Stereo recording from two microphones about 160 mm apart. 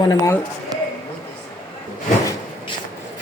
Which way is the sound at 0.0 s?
20° left (ahead or behind).